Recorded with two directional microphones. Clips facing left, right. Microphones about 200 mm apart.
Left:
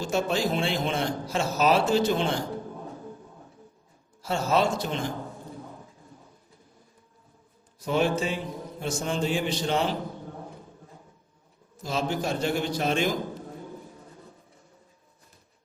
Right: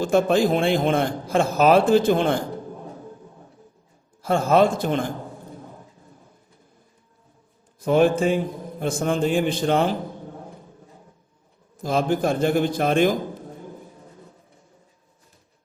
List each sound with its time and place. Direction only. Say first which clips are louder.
0.0 s a man's voice: right 8 dB; 55° right (ahead or behind)
4.2 s a man's voice: right 7 dB; 50° right (ahead or behind)
7.8 s a man's voice: right 7 dB; 55° right (ahead or behind)
11.8 s a man's voice: right 7 dB; 55° right (ahead or behind)